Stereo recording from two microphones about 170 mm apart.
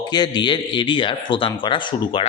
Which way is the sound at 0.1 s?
25° left (ahead or behind).